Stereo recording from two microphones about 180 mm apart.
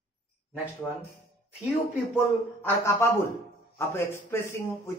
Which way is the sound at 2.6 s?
15° left (ahead or behind).